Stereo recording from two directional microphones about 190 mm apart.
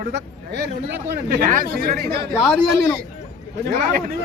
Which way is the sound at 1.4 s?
45° right (ahead or behind).